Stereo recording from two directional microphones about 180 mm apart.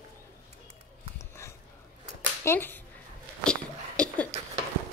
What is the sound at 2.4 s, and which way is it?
Speech, 10° left (ahead or behind).